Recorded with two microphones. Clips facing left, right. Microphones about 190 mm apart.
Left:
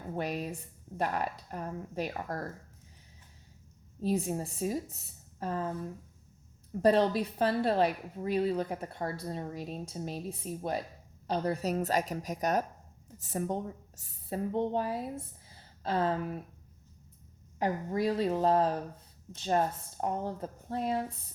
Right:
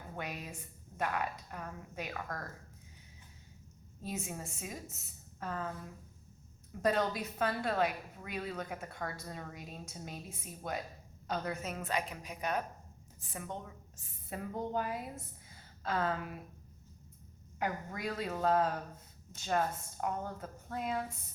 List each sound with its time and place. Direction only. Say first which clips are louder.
0.2 s a woman's voice: left 8 dB; 35° left (ahead or behind)
4.0 s a woman's voice: left 10 dB; 35° left (ahead or behind)
6.8 s a woman's voice: left 7 dB; 30° left (ahead or behind)
17.6 s a woman's voice: left 7 dB; 30° left (ahead or behind)